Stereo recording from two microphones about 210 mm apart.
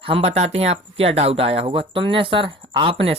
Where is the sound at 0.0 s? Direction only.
30° right (ahead or behind).